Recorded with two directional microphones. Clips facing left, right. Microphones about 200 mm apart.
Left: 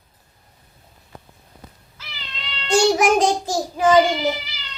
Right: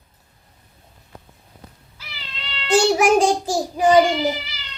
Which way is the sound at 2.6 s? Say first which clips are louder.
Right 1 dB; 5° right (ahead or behind).